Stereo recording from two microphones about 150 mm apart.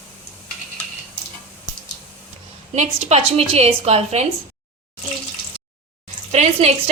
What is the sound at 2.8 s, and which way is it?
A woman's voice, 50° right (ahead or behind).